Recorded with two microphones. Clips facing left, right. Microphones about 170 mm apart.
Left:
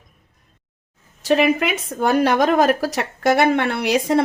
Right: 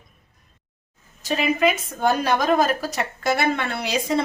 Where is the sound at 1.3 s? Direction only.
70° left (ahead or behind).